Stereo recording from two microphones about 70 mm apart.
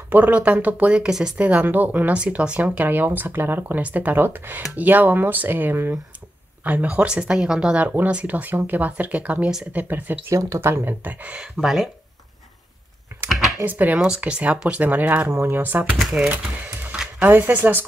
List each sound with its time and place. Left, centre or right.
0.1 s speech: right
10.3 s speech: right
10.6 s speech: right
11.4 s speech: centre
13.3 s computer keyboard: centre
13.7 s speech: right
13.9 s speech: centre
15.3 s speech: right
15.6 s speech: right